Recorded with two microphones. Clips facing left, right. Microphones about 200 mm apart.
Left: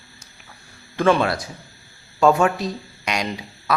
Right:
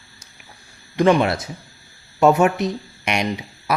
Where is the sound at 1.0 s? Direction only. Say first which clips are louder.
Right 2 dB; 20° right (ahead or behind).